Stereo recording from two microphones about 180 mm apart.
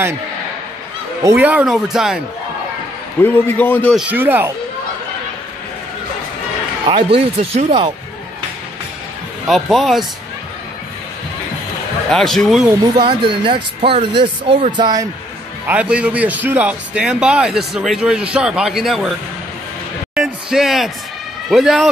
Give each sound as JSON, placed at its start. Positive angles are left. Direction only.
{"t": 1.2, "sound": "speech", "side_deg": -10}
{"t": 3.2, "sound": "a man's voice", "side_deg": 10}
{"t": 3.9, "sound": "speech", "side_deg": -10}
{"t": 6.9, "sound": "speech", "side_deg": -30}
{"t": 9.5, "sound": "a man's voice", "side_deg": 0}
{"t": 12.1, "sound": "a man's voice", "side_deg": 5}
{"t": 12.6, "sound": "speech", "side_deg": -25}
{"t": 15.6, "sound": "a man's voice", "side_deg": -10}
{"t": 20.2, "sound": "a sound", "side_deg": -5}
{"t": 21.5, "sound": "a man's voice", "side_deg": 0}